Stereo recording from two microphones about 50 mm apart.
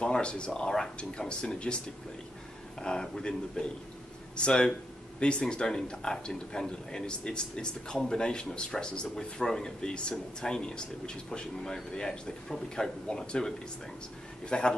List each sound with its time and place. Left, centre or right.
0.0 s speech: centre
2.8 s speech: centre